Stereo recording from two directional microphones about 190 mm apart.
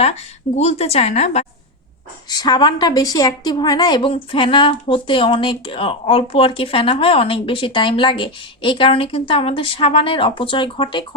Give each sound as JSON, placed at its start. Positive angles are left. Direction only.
{"t": 0.0, "sound": "a woman's voice", "side_deg": 35}
{"t": 2.3, "sound": "a woman's voice", "side_deg": 20}